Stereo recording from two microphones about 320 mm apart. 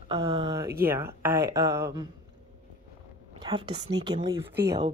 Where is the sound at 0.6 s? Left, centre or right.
Right.